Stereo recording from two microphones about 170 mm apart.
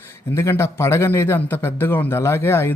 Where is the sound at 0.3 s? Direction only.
15° left (ahead or behind).